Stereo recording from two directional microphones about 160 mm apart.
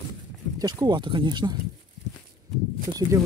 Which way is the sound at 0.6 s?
25° right (ahead or behind).